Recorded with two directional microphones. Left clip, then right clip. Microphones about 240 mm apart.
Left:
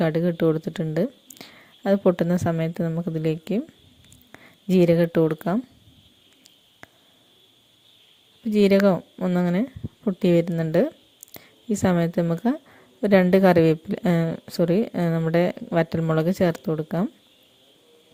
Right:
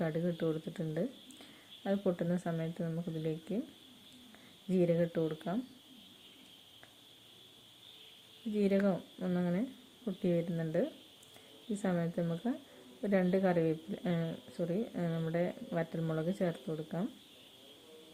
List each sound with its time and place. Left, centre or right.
0.0 s speech: left
4.7 s a woman's voice: left
8.5 s a woman's voice: left